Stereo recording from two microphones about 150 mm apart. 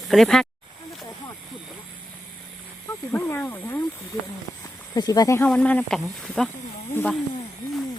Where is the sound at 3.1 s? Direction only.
10° left (ahead or behind).